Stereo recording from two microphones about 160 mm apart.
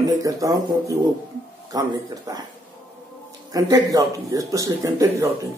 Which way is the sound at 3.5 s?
20° right (ahead or behind).